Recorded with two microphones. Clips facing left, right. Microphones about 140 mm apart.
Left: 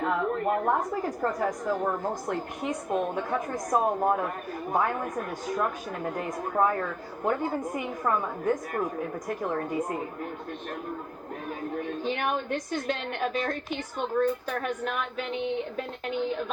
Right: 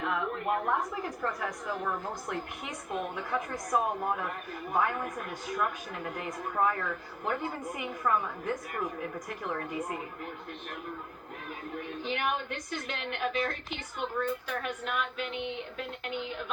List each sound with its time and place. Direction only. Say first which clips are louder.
0.0 s a woman's voice: left 5 dB; 40° left (ahead or behind)
11.8 s a woman's voice: left 3 dB; 40° left (ahead or behind)